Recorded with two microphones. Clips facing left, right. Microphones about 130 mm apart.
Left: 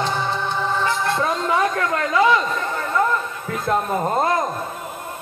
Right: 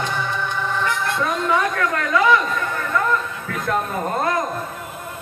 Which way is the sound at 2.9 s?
25° left (ahead or behind).